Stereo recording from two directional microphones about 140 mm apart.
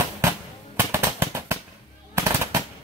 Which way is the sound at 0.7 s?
20° right (ahead or behind).